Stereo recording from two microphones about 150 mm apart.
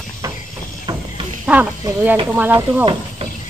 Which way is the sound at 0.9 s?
30° right (ahead or behind).